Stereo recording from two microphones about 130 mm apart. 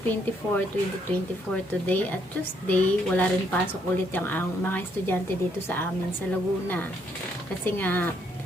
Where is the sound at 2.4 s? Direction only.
10° left (ahead or behind).